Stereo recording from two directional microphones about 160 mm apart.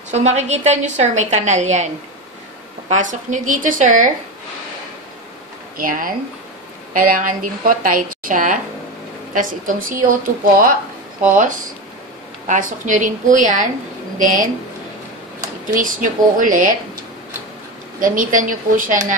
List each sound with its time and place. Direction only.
0.1 s a woman's voice: 45° right (ahead or behind)
2.9 s a woman's voice: 50° right (ahead or behind)
5.8 s a woman's voice: 60° right (ahead or behind)
15.7 s a woman's voice: 55° right (ahead or behind)
17.9 s a woman's voice: 55° right (ahead or behind)